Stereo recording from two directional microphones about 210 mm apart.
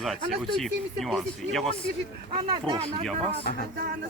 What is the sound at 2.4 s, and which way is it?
Speech, 20° right (ahead or behind).